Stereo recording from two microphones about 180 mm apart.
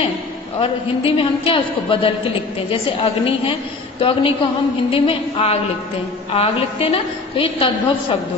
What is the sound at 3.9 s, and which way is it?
A woman's voice, 30° left (ahead or behind).